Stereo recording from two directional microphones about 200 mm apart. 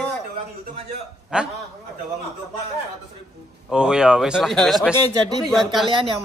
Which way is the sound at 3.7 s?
5° right (ahead or behind).